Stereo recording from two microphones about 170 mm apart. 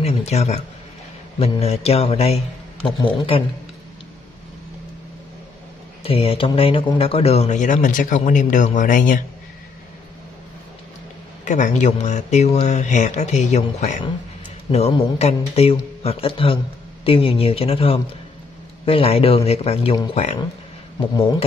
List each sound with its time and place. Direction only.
0.0 s a man's voice: 40° left (ahead or behind)
6.0 s a man's voice: 35° left (ahead or behind); by 9.2 s 50° left (ahead or behind)
11.4 s a man's voice: 45° left (ahead or behind)